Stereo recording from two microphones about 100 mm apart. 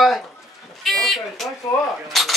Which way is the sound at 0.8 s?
Centre (ahead or behind).